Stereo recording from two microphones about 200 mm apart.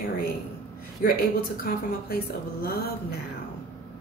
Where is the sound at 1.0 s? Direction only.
45° left (ahead or behind).